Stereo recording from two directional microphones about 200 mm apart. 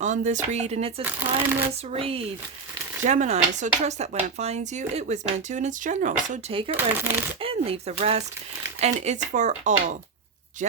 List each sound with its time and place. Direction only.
0.0 s speech: 35° right (ahead or behind)
1.5 s speech: 10° right (ahead or behind)
1.9 s speech: 30° right (ahead or behind)
6.3 s speech: 30° right (ahead or behind)
6.7 s speech: 10° right (ahead or behind)
7.4 s speech: 30° right (ahead or behind)